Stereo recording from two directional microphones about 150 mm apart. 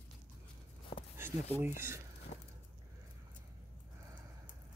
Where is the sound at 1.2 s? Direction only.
15° right (ahead or behind).